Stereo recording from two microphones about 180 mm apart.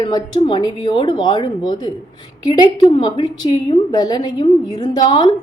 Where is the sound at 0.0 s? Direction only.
25° left (ahead or behind).